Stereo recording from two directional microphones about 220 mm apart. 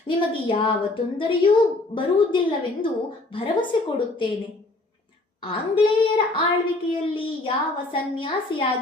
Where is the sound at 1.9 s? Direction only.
20° left (ahead or behind).